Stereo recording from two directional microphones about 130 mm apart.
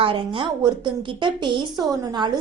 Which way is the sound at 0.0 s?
40° right (ahead or behind).